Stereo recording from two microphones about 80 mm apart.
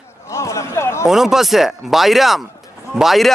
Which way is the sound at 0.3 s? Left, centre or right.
Left.